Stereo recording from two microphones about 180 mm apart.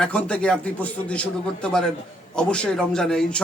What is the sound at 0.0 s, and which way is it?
A man's voice, 5° left (ahead or behind).